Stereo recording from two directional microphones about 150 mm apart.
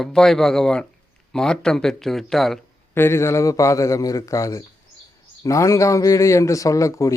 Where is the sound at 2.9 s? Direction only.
15° left (ahead or behind).